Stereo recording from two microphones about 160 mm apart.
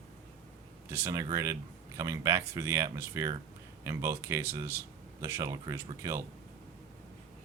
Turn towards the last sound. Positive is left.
turn(degrees=-20)  # may be behind; listen again after turning